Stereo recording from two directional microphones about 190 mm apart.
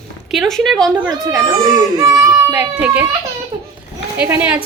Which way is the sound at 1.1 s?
20° right (ahead or behind).